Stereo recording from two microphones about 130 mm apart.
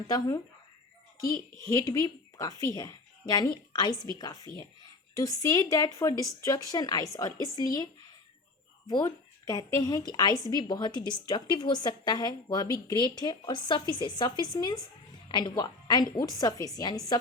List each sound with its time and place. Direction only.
0.1 s speech: 25° left (ahead or behind)
1.6 s a woman's voice: 30° left (ahead or behind)
8.9 s a woman's voice: 30° left (ahead or behind)